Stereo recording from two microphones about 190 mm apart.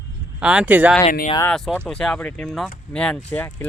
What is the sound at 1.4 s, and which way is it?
Speech, 5° left (ahead or behind).